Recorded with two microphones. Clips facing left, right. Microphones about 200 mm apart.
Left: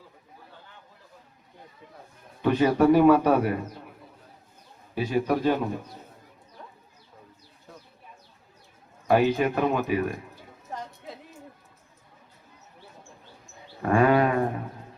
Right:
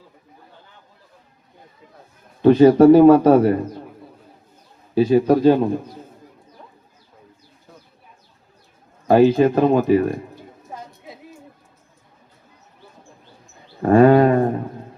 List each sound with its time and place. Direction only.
2.4 s speech: 40° right (ahead or behind)
4.9 s speech: 35° right (ahead or behind)
6.6 s a sound: 10° right (ahead or behind)
9.0 s speech: 35° right (ahead or behind)
10.7 s music: 10° right (ahead or behind)
13.8 s speech: 35° right (ahead or behind)